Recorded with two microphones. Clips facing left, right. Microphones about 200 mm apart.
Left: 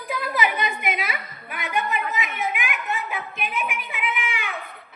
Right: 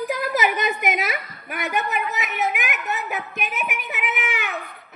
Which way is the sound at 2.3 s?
40° right (ahead or behind).